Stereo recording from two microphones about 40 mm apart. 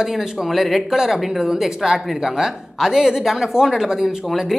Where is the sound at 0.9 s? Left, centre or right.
Centre.